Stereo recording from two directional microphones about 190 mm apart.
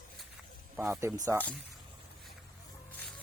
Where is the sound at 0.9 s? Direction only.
15° right (ahead or behind).